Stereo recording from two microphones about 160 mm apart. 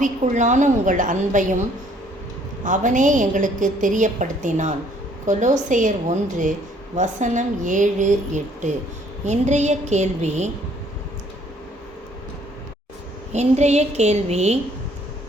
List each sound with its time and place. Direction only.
0.0 s a woman's voice: 50° right (ahead or behind)
2.6 s a woman's voice: 50° right (ahead or behind)
13.3 s a woman's voice: 45° right (ahead or behind)